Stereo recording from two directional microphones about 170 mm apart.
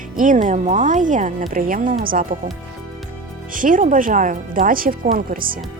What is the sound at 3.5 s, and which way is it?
Speech, 50° right (ahead or behind).